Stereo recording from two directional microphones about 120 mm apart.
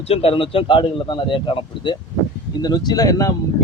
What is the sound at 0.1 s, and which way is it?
A man's voice, 50° left (ahead or behind).